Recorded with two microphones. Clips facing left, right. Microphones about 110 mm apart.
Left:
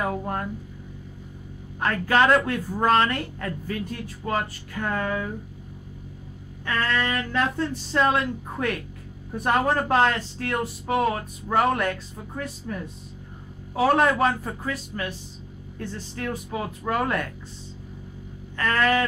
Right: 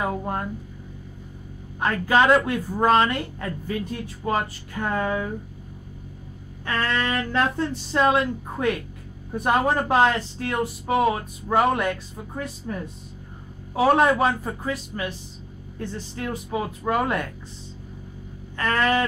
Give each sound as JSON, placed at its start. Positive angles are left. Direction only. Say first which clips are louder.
{"t": 0.0, "sound": "speech", "louder": "right 1 dB", "side_deg": -15}
{"t": 1.8, "sound": "speech", "louder": "right 1 dB", "side_deg": -15}
{"t": 6.6, "sound": "speech", "louder": "even", "side_deg": -25}
{"t": 18.6, "sound": "speech", "louder": "even", "side_deg": -25}